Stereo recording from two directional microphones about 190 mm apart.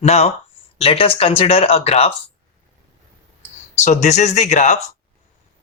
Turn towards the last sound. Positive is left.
turn(degrees=40)  # may be behind; listen again after turning